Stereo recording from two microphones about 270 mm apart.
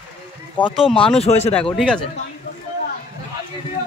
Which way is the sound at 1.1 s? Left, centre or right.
Left.